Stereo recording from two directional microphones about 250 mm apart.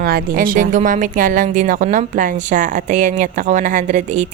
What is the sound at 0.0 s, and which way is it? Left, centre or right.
A woman's voice, right.